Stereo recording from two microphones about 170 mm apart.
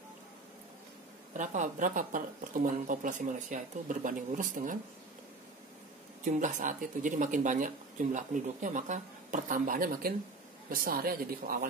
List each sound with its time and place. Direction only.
1.3 s speech: 45° right (ahead or behind)
6.2 s speech: 50° right (ahead or behind)